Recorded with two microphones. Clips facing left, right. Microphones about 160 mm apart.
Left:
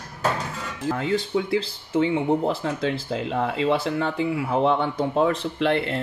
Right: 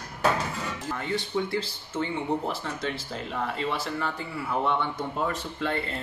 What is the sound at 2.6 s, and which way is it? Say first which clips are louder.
Speech: left 7 dB; 90° left.